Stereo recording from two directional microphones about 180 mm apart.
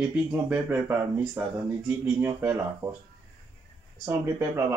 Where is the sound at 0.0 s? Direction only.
5° right (ahead or behind).